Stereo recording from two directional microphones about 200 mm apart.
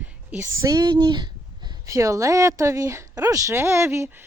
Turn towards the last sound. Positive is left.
turn(degrees=-15)  # may be behind; listen again after turning